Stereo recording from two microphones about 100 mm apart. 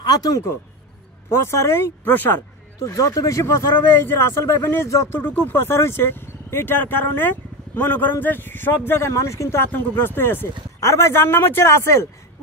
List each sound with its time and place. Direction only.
0.0 s speech: 40° left (ahead or behind)
1.3 s speech: 25° left (ahead or behind)
2.8 s speech: 35° left (ahead or behind)